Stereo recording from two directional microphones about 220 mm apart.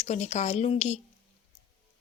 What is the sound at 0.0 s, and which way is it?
Speech, 30° left (ahead or behind).